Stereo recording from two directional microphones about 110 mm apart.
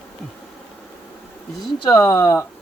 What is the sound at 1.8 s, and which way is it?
Speech, 35° left (ahead or behind).